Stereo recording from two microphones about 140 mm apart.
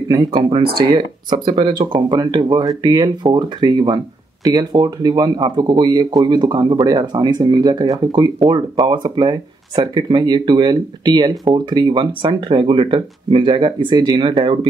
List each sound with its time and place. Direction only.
0.1 s speech: 30° right (ahead or behind)